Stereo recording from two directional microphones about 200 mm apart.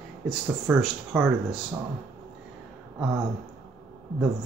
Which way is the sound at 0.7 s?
10° right (ahead or behind).